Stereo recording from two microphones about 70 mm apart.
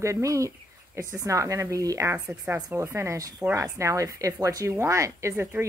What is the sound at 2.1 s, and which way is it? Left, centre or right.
Speech, centre.